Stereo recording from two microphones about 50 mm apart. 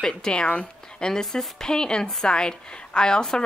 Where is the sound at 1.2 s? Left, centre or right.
Centre.